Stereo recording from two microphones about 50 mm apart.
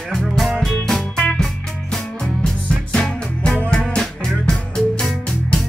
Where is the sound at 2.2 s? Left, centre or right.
Centre.